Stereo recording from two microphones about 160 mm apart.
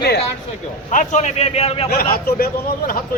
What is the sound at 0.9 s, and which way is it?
Speech, 50° left (ahead or behind).